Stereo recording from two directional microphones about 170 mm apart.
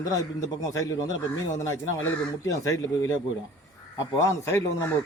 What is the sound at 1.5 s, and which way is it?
A man's voice, 15° left (ahead or behind).